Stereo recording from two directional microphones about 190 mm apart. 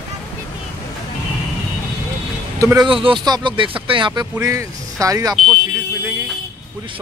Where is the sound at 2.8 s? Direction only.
25° right (ahead or behind).